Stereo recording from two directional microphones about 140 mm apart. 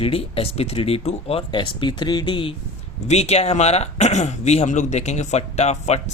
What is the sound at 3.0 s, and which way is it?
Speech, 50° left (ahead or behind).